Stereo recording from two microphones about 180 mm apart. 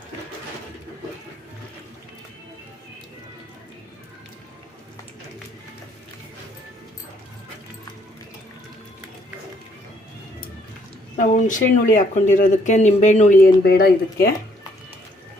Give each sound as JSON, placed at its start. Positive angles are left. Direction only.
{"t": 11.2, "sound": "speech", "side_deg": 45}